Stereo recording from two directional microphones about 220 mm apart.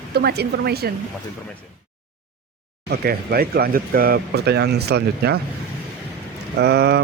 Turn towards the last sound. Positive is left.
turn(degrees=-45)  # may be behind; listen again after turning